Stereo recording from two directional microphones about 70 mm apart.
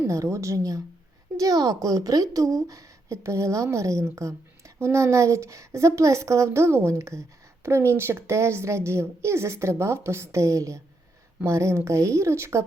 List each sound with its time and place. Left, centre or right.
0.1 s a woman's voice: right